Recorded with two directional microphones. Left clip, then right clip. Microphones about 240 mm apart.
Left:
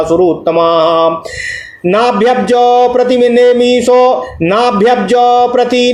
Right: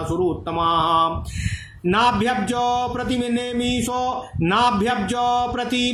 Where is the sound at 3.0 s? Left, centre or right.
Centre.